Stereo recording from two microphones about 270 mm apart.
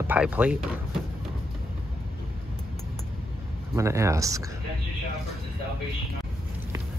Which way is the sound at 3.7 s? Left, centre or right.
Centre.